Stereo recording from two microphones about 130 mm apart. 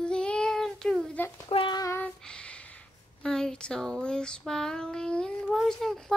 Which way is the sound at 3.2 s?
5° left (ahead or behind).